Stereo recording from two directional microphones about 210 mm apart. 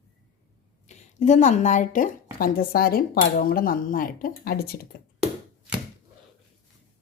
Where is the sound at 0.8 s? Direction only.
35° left (ahead or behind).